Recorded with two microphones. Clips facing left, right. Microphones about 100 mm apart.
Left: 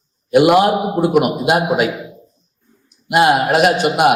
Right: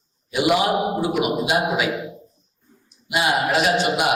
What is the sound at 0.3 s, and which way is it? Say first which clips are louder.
A man's voice: left 8 dB; 55° left (ahead or behind).